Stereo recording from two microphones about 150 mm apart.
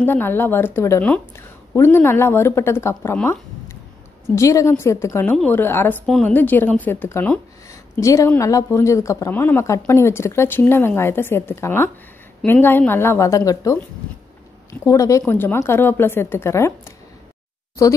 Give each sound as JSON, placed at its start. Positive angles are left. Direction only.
{"t": 0.0, "sound": "a woman's voice", "side_deg": 15}
{"t": 3.2, "sound": "a sound", "side_deg": 15}
{"t": 4.4, "sound": "a woman's voice", "side_deg": 20}
{"t": 6.0, "sound": "a woman's voice", "side_deg": 0}
{"t": 6.3, "sound": "a woman's voice", "side_deg": 10}